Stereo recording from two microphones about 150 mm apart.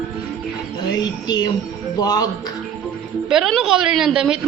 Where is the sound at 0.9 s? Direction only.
30° left (ahead or behind).